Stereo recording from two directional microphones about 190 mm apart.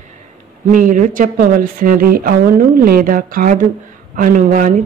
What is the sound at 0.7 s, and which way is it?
Speech, 45° right (ahead or behind).